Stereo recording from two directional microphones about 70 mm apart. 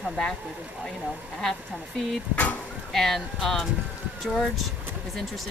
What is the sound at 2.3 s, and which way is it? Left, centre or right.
Speech, left.